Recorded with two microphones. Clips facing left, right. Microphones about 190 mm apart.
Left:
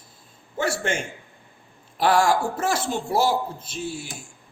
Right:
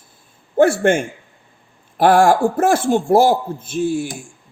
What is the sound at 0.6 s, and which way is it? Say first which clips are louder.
A man's voice: right 12 dB; 55° right (ahead or behind).